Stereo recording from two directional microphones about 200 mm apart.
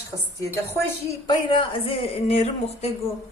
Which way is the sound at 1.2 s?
25° left (ahead or behind).